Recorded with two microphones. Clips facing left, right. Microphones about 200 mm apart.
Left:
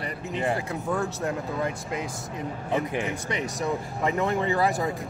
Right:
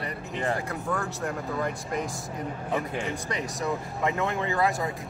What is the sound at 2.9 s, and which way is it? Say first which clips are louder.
Speech: left 2 dB; 15° left (ahead or behind).